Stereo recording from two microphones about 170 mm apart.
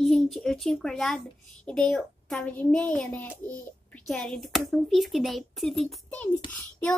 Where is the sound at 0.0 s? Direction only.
Centre (ahead or behind).